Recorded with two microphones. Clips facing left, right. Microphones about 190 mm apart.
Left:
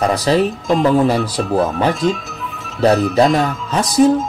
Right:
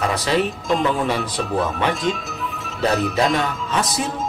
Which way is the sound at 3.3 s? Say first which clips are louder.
Left 4 dB; 40° left (ahead or behind).